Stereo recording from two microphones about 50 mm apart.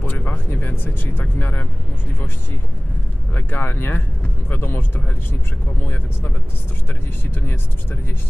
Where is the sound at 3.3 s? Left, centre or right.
Left.